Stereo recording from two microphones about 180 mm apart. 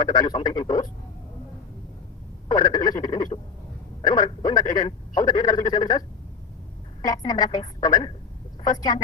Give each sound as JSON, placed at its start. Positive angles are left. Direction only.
{"t": 0.0, "sound": "speech", "side_deg": 25}
{"t": 2.5, "sound": "speech", "side_deg": 25}